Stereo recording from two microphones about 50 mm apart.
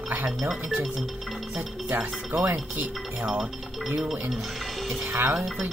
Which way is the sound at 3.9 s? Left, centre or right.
Right.